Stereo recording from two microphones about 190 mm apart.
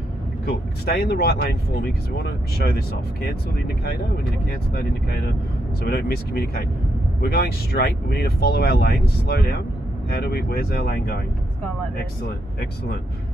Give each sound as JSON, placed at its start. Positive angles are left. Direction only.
{"t": 0.8, "sound": "speech", "side_deg": 55}
{"t": 4.7, "sound": "speech", "side_deg": 55}
{"t": 12.5, "sound": "speech", "side_deg": 55}